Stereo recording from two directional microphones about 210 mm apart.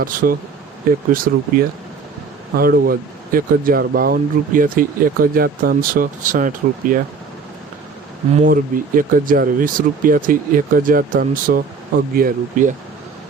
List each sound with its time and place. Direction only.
0.0 s speech: 40° right (ahead or behind)
8.4 s speech: 40° right (ahead or behind)